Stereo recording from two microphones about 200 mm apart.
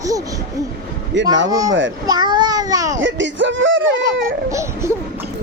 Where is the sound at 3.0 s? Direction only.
65° right (ahead or behind).